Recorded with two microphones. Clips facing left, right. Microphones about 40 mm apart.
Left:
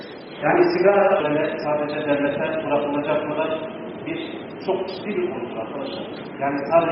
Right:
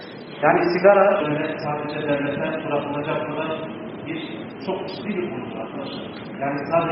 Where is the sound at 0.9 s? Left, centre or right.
Right.